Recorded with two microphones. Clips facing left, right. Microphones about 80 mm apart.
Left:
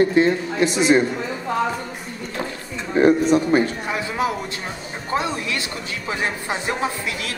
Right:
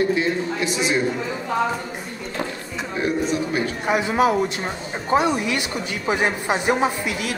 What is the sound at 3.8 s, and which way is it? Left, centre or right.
Speech, centre.